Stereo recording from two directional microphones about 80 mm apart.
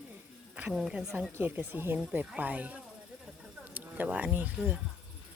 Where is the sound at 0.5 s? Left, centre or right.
Centre.